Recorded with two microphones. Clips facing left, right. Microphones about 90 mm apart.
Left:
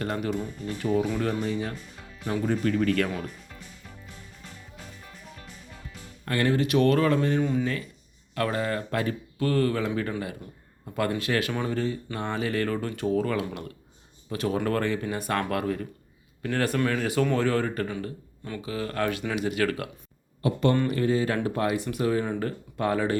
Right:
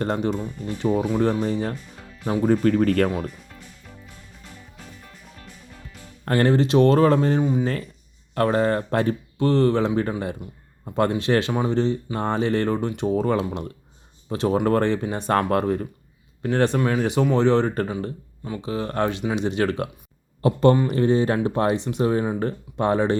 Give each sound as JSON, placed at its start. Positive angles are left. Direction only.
{"t": 0.0, "sound": "speech", "side_deg": -30}
{"t": 0.3, "sound": "speech", "side_deg": -20}
{"t": 5.0, "sound": "music", "side_deg": 5}
{"t": 6.2, "sound": "speech", "side_deg": -35}